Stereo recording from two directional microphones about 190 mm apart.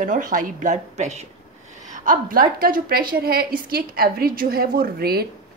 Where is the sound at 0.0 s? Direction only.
45° right (ahead or behind).